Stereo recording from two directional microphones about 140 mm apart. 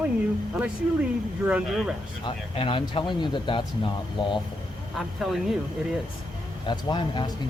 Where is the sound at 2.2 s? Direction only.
40° left (ahead or behind).